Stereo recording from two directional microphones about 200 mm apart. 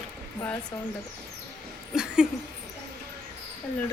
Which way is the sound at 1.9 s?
5° right (ahead or behind).